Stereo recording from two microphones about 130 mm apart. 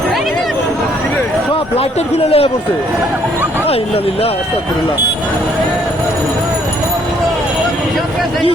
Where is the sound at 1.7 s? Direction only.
50° left (ahead or behind).